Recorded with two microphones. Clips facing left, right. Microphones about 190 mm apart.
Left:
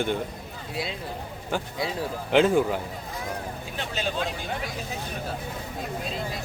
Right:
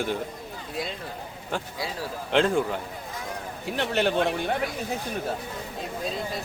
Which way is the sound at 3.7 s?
65° right (ahead or behind).